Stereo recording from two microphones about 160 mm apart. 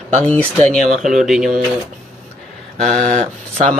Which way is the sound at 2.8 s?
50° right (ahead or behind).